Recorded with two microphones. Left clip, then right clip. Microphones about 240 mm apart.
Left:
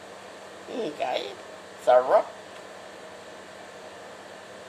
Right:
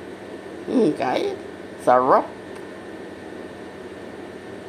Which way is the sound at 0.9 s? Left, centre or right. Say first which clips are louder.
Right 6 dB; right.